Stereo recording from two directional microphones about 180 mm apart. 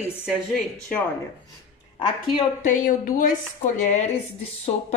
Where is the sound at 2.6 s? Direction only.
50° left (ahead or behind).